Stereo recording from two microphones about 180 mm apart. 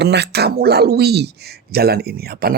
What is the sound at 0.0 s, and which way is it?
Speech, 70° right (ahead or behind).